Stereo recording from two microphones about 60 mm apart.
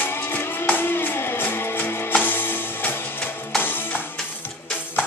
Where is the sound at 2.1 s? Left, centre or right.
Left.